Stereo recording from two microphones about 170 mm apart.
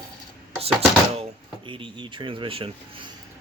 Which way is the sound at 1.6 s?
30° right (ahead or behind).